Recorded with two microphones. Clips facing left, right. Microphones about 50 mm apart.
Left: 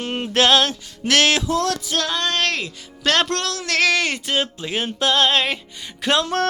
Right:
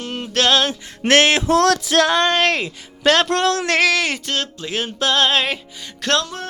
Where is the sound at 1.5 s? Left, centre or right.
Right.